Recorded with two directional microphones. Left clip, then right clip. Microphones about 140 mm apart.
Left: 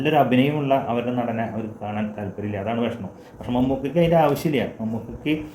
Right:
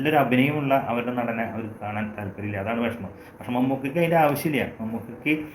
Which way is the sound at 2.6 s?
25° left (ahead or behind).